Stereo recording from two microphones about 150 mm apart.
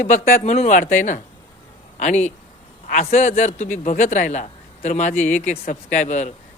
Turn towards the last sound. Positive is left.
turn(degrees=55)  # may be behind; listen again after turning